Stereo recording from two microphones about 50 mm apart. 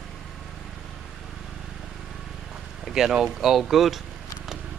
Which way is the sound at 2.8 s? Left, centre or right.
Centre.